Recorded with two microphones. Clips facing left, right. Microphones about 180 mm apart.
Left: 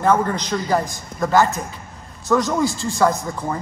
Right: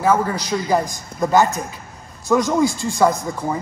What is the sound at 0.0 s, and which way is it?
A man's voice, 5° right (ahead or behind).